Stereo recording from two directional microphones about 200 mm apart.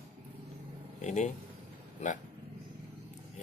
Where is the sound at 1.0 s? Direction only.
35° left (ahead or behind).